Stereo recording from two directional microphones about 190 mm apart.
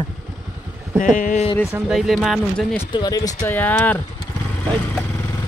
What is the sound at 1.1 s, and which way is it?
Speech, 40° left (ahead or behind).